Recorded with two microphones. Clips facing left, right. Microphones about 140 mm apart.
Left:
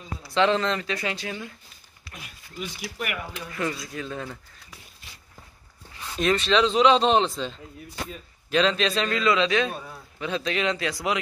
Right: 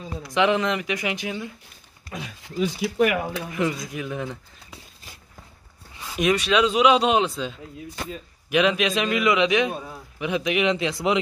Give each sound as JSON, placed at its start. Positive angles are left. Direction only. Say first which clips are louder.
{"t": 0.3, "sound": "a man's voice", "louder": "right 1 dB", "side_deg": -15}
{"t": 2.1, "sound": "speech", "louder": "right 10 dB", "side_deg": -90}
{"t": 3.5, "sound": "a man's voice", "louder": "right 3 dB", "side_deg": -20}
{"t": 5.9, "sound": "a man's voice", "louder": "right 2 dB", "side_deg": -15}